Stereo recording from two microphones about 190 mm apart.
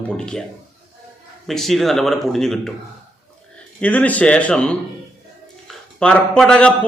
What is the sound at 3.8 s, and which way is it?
Speech, 10° left (ahead or behind).